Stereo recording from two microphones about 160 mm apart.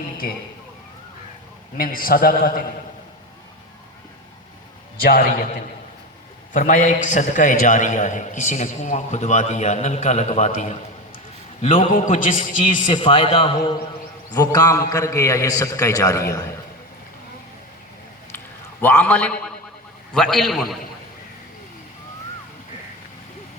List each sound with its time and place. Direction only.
1.8 s a man's voice: 65° left (ahead or behind)
4.9 s a man's voice: 70° left (ahead or behind)
6.5 s a man's voice: 55° left (ahead or behind)
11.6 s a man's voice: 35° left (ahead or behind)
11.9 s a man's voice: 60° left (ahead or behind)
12.9 s a man's voice: 30° left (ahead or behind)
18.8 s a man's voice: 10° left (ahead or behind)